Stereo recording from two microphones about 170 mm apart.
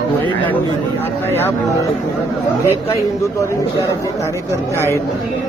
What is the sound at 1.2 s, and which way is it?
Speech, 10° left (ahead or behind).